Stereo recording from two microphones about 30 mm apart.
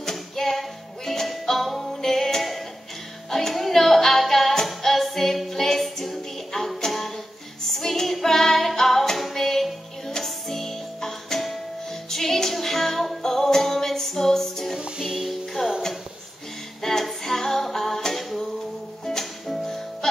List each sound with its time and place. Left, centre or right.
0.1 s music: centre
7.7 s female singing: centre
10.0 s music: centre
14.8 s music: right
15.6 s music: centre
16.8 s music: centre